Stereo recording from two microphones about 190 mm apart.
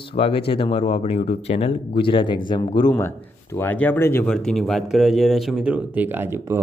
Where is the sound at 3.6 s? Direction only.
10° left (ahead or behind).